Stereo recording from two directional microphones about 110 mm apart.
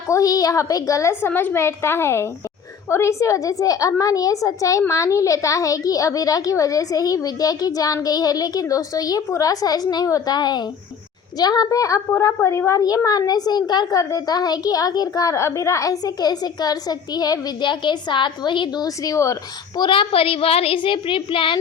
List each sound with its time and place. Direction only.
0.1 s a woman's voice: 35° left (ahead or behind)
19.0 s a woman's voice: 30° left (ahead or behind)
19.8 s a woman's voice: 50° left (ahead or behind)